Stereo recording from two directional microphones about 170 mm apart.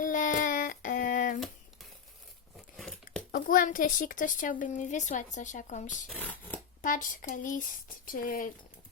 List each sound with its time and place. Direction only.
0.0 s child singing: 50° left (ahead or behind)
2.7 s a sound: 5° left (ahead or behind)
3.3 s a woman's voice: 55° left (ahead or behind)
6.1 s speech: 10° left (ahead or behind)
6.8 s a woman's voice: 50° left (ahead or behind)